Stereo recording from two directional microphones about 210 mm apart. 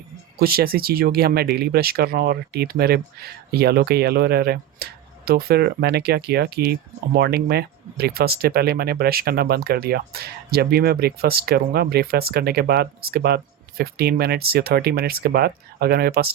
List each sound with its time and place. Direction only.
0.3 s speech: 45° right (ahead or behind)